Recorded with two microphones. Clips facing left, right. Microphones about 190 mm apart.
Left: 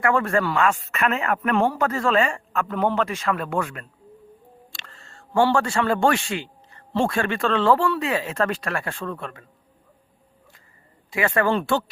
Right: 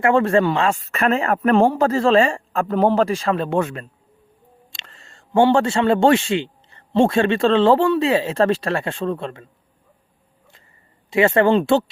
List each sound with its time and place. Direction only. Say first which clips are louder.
0.0 s a man's voice: right 5 dB; 25° right (ahead or behind)
11.1 s speech: right 6 dB; 25° right (ahead or behind)